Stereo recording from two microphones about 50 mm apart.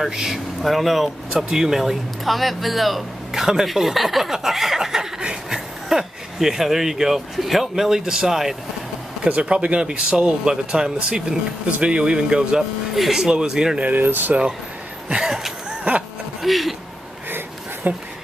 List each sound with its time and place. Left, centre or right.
0.1 s speech: centre
9.2 s speech: centre
12.9 s speech: centre
13.2 s speech: centre
13.7 s speech: right
15.0 s a sound: centre
15.9 s a sound: right
16.4 s speech: centre
17.8 s speech: right